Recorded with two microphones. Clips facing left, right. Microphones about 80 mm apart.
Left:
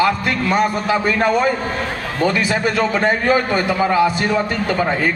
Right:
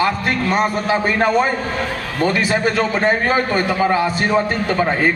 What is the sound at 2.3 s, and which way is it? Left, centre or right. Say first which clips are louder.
A man's voice: right 3 dB; right.